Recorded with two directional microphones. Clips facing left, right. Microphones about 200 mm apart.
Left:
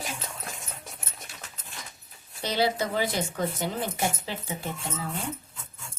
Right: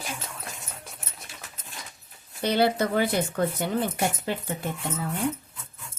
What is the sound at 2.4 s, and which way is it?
Speech, 55° right (ahead or behind).